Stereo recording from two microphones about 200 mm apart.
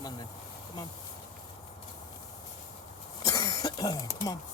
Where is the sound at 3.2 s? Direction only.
20° left (ahead or behind).